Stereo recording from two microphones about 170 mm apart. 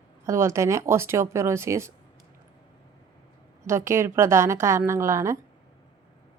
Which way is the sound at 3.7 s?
15° right (ahead or behind).